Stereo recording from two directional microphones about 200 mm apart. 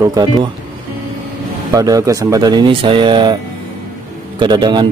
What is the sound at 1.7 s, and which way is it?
A man's voice, 15° right (ahead or behind).